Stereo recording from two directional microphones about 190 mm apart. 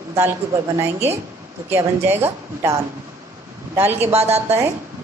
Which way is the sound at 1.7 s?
10° right (ahead or behind).